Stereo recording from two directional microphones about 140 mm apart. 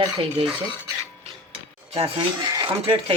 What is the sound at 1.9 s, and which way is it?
Speech, 40° right (ahead or behind).